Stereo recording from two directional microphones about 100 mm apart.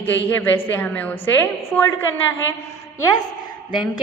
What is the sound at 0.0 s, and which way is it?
A woman's voice, 20° left (ahead or behind).